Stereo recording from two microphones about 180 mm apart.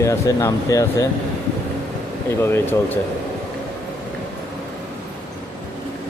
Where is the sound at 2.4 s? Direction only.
10° left (ahead or behind).